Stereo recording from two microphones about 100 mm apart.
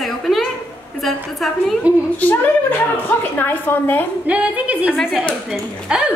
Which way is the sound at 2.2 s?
20° left (ahead or behind).